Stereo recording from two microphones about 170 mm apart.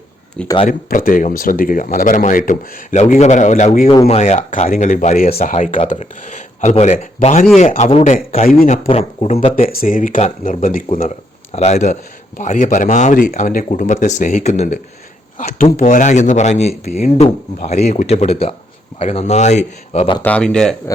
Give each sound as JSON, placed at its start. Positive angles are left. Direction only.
{"t": 0.4, "sound": "speech", "side_deg": 30}
{"t": 0.7, "sound": "speech", "side_deg": 55}
{"t": 3.8, "sound": "speech", "side_deg": 35}
{"t": 5.5, "sound": "speech", "side_deg": 45}
{"t": 9.6, "sound": "speech", "side_deg": 50}
{"t": 11.5, "sound": "speech", "side_deg": 40}
{"t": 20.2, "sound": "speech", "side_deg": 5}